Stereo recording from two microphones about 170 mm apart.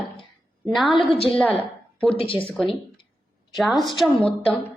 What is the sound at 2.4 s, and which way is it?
A woman's voice, 5° left (ahead or behind).